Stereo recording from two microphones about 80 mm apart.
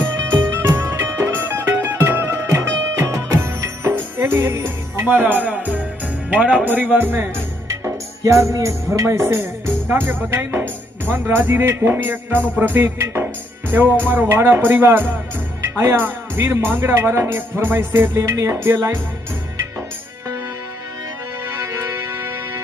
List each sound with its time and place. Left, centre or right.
0.4 s music: right
6.3 s a man's voice: centre
7.7 s music: right
10.2 s speech: right
21.6 s music: right